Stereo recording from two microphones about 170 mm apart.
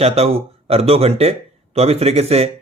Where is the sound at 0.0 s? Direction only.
35° right (ahead or behind).